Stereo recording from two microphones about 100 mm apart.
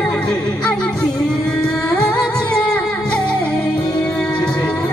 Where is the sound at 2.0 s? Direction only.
5° left (ahead or behind).